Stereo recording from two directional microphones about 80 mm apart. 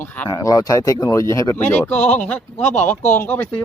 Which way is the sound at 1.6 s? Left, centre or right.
Left.